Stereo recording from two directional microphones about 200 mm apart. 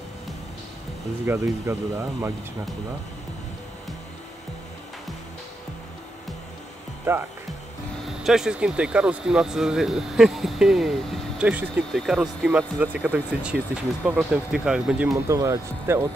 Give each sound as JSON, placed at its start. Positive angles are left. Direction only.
{"t": 1.2, "sound": "speech", "side_deg": -15}
{"t": 7.1, "sound": "speech", "side_deg": -10}
{"t": 8.2, "sound": "speech", "side_deg": 0}
{"t": 15.2, "sound": "speech", "side_deg": -15}